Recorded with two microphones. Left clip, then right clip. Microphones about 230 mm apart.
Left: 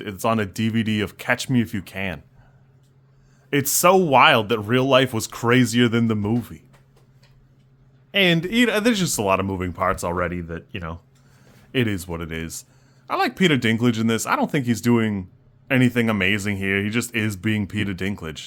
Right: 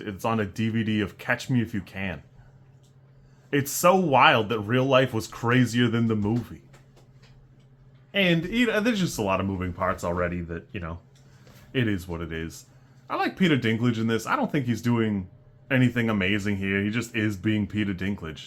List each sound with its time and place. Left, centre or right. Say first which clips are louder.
0.0 s speech: left 5 dB; left
3.5 s speech: left 4 dB; left
8.1 s speech: left 5 dB; left